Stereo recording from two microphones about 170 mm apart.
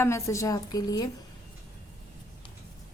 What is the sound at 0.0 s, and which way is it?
A woman's voice, 15° left (ahead or behind).